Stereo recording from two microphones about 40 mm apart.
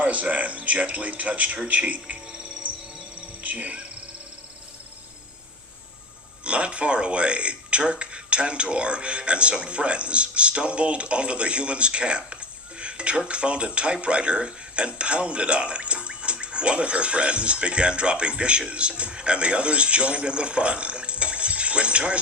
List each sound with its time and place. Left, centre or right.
0.0 s speech: right
1.6 s music: right
6.4 s a man's voice: right